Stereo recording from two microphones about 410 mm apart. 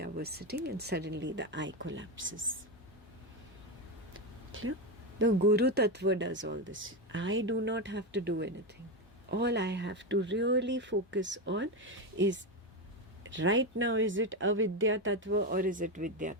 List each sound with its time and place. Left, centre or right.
0.0 s speech: right
4.1 s a sound: right
5.2 s speech: right